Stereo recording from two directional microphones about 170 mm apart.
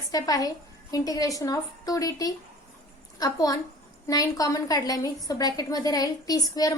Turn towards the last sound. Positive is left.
turn(degrees=20)  # may be behind; listen again after turning